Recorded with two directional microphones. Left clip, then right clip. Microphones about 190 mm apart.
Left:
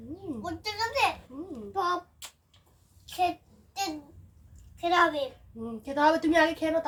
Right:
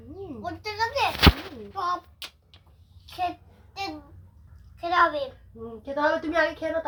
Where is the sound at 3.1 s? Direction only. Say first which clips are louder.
Left 2 dB; 15° left (ahead or behind).